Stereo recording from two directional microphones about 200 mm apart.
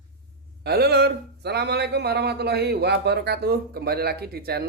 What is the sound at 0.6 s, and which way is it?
Speech, 55° right (ahead or behind).